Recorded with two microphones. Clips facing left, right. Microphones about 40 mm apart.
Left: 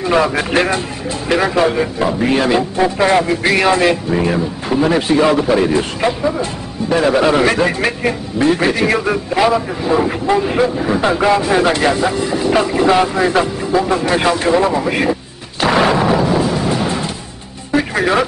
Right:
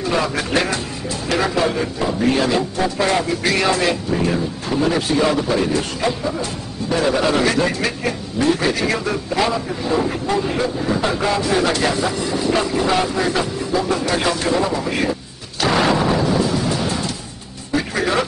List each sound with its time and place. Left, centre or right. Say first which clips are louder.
0.0 s a man's voice: left 6 dB; left
15.6 s music: left 4 dB; centre